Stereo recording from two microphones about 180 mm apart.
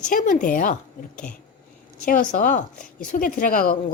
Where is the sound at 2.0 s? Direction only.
45° left (ahead or behind).